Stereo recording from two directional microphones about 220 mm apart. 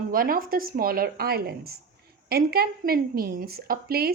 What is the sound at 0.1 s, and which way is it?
A woman's voice, 40° right (ahead or behind).